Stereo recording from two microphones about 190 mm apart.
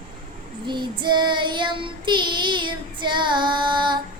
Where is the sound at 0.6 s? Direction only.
25° right (ahead or behind).